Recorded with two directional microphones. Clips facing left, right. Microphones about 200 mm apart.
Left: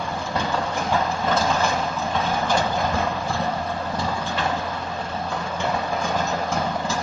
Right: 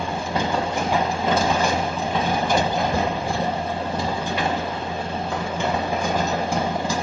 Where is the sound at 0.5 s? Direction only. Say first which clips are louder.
Right 1 dB; 15° right (ahead or behind).